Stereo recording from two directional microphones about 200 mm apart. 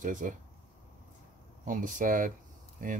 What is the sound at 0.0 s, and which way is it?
Speech, 40° right (ahead or behind).